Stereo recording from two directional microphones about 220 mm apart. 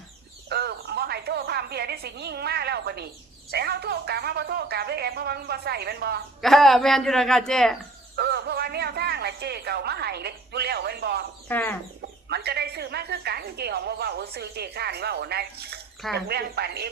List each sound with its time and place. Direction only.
0.4 s a sound: 50° right (ahead or behind)
3.5 s speech: 45° right (ahead or behind)
6.4 s a woman's voice: centre (ahead or behind)
8.1 s speech: 50° right (ahead or behind)
11.4 s speech: 10° left (ahead or behind)
12.3 s speech: 45° right (ahead or behind)